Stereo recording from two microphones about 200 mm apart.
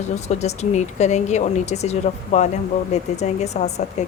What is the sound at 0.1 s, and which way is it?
A woman's voice, 35° left (ahead or behind).